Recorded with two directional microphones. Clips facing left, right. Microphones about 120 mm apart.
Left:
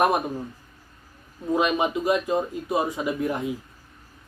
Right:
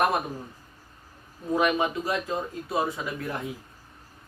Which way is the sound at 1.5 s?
20° left (ahead or behind).